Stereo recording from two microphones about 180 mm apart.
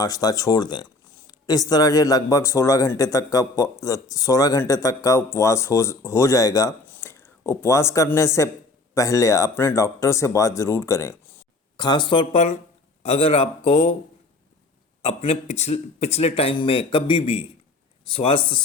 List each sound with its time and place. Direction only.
0.0 s speech: 20° left (ahead or behind)
15.0 s speech: 35° left (ahead or behind)